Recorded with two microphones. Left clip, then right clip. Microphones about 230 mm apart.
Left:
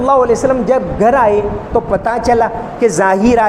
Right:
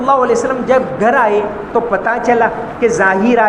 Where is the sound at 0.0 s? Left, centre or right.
Left.